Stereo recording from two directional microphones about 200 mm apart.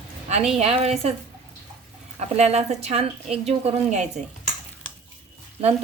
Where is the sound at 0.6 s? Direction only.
30° right (ahead or behind).